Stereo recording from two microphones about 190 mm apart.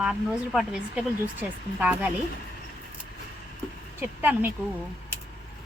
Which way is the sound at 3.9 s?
10° right (ahead or behind).